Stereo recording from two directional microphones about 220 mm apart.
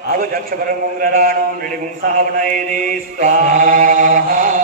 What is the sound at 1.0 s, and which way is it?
Speech, 45° right (ahead or behind).